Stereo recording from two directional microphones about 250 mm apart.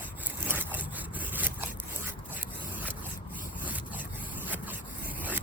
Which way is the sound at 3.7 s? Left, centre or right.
Centre.